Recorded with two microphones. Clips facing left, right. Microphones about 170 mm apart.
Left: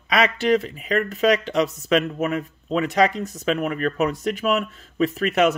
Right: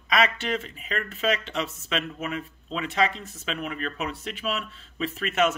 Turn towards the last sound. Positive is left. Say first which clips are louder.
# left 5 dB
turn(degrees=35)  # may be behind; listen again after turning